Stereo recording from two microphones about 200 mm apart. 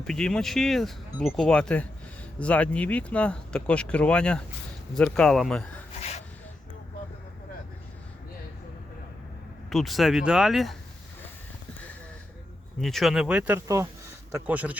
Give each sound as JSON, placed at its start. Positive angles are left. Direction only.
{"t": 0.1, "sound": "speech", "side_deg": 5}
{"t": 5.9, "sound": "gasp", "side_deg": 30}
{"t": 9.6, "sound": "speech", "side_deg": 0}
{"t": 12.8, "sound": "speech", "side_deg": 0}